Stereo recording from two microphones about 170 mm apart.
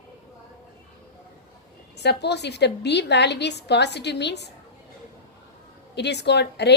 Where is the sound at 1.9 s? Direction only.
80° left.